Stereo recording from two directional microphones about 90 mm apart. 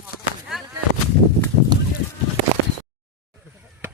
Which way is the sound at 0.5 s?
5° right (ahead or behind).